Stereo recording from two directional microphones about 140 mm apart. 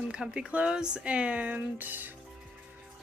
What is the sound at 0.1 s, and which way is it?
Speech, 5° right (ahead or behind).